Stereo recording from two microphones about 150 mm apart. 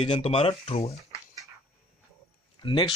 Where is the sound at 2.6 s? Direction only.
30° left (ahead or behind).